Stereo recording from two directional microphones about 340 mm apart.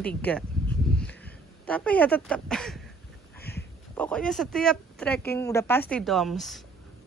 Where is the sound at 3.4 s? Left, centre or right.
Left.